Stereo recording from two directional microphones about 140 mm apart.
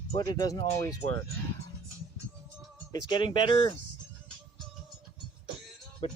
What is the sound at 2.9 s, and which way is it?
Speech, 30° left (ahead or behind).